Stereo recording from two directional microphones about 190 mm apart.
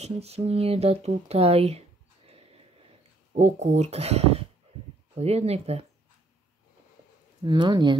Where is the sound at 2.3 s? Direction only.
30° right (ahead or behind).